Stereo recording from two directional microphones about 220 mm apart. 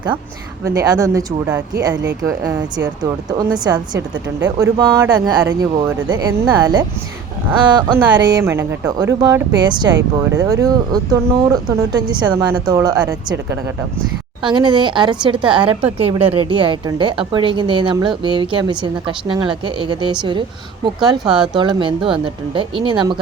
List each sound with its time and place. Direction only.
0.6 s a woman's voice: 15° right (ahead or behind)
14.4 s a woman's voice: 20° right (ahead or behind)
21.2 s speech: 5° right (ahead or behind)
21.5 s a woman's voice: 20° right (ahead or behind)